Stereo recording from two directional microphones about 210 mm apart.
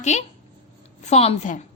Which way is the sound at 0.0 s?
35° left (ahead or behind).